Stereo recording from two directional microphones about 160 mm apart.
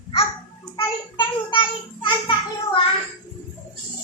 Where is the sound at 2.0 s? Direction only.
30° left (ahead or behind).